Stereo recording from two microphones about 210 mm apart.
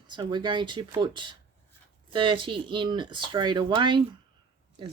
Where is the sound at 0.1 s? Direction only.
20° right (ahead or behind).